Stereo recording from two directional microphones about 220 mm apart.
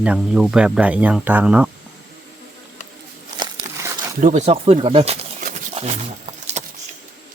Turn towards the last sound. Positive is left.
turn(degrees=-30)  # may be behind; listen again after turning